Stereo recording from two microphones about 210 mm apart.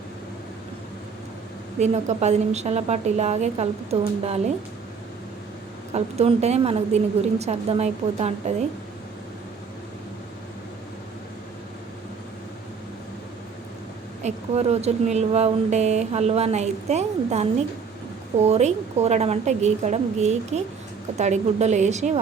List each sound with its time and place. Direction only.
1.8 s a woman's voice: 35° right (ahead or behind)
5.9 s speech: 30° right (ahead or behind)
14.3 s speech: 30° right (ahead or behind)